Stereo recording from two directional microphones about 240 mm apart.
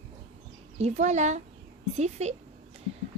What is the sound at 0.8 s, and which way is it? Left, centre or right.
Speech, right.